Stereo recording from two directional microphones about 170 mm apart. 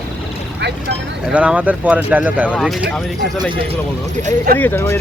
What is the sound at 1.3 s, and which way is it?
Speech, 5° right (ahead or behind).